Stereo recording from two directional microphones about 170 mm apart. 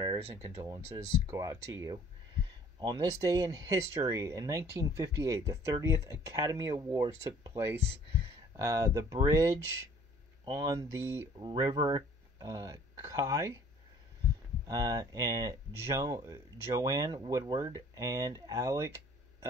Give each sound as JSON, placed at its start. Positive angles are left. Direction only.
{"t": 0.0, "sound": "speech", "side_deg": -20}
{"t": 14.7, "sound": "speech", "side_deg": -20}